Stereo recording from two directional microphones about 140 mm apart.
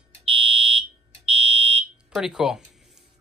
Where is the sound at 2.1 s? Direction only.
5° right (ahead or behind).